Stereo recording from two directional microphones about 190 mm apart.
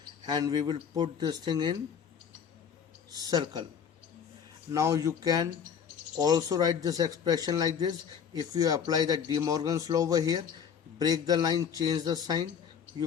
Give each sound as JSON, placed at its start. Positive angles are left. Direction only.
{"t": 0.3, "sound": "speech", "side_deg": -20}
{"t": 3.1, "sound": "speech", "side_deg": -20}
{"t": 4.7, "sound": "speech", "side_deg": -15}